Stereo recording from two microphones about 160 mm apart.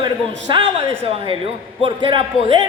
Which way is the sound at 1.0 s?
35° right (ahead or behind).